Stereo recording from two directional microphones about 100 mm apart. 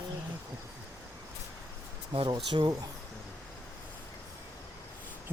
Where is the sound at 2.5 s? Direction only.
50° right (ahead or behind).